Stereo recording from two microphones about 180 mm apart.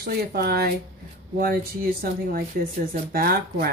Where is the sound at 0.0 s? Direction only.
60° right (ahead or behind).